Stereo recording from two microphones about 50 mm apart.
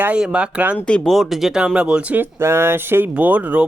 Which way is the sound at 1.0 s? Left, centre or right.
Centre.